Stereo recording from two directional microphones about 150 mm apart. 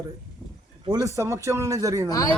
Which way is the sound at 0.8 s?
25° right (ahead or behind).